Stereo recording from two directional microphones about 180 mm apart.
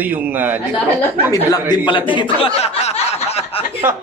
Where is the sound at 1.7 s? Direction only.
25° left (ahead or behind).